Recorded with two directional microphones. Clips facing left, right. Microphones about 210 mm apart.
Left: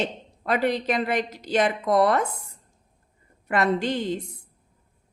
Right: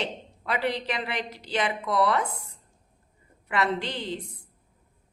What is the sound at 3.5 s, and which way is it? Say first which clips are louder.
Speech: left 5 dB; 45° left (ahead or behind).